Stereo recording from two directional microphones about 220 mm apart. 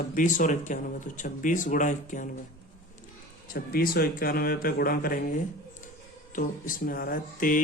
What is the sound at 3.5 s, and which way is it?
Speech, 40° left (ahead or behind).